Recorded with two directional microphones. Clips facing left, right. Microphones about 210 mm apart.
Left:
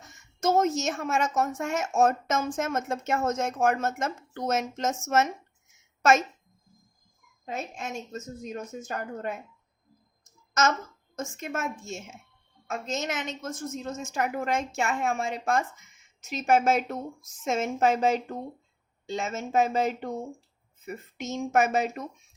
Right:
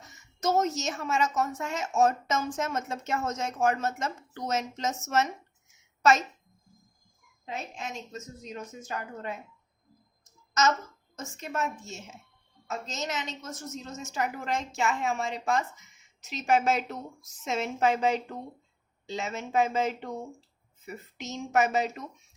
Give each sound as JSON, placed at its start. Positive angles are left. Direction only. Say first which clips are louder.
{"t": 0.0, "sound": "a woman's voice", "louder": "left 3 dB", "side_deg": 50}
{"t": 7.4, "sound": "a woman's voice", "louder": "left 3 dB", "side_deg": 45}
{"t": 10.5, "sound": "speech", "louder": "even", "side_deg": 50}
{"t": 12.6, "sound": "a woman's voice", "louder": "left 3 dB", "side_deg": 55}